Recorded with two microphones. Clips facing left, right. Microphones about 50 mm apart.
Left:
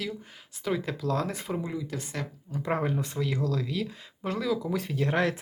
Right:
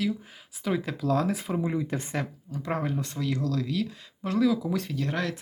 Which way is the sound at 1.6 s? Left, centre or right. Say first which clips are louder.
Right 5 dB; right.